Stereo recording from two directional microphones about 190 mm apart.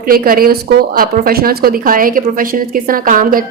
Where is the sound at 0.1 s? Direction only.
50° right (ahead or behind).